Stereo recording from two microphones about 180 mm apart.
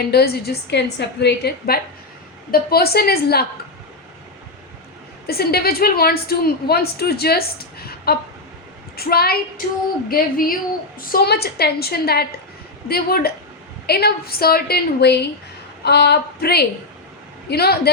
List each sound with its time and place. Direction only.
0.1 s a woman's voice: 60° left (ahead or behind)
5.2 s a woman's voice: 60° left (ahead or behind)
10.1 s a sound: 50° left (ahead or behind)
11.1 s a woman's voice: 60° left (ahead or behind)